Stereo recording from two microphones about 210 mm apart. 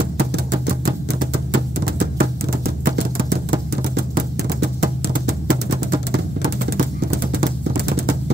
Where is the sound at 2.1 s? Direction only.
45° right (ahead or behind).